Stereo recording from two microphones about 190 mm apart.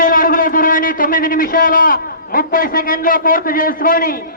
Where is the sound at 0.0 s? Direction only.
45° left (ahead or behind).